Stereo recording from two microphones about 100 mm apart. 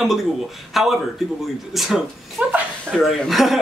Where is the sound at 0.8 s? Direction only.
Centre (ahead or behind).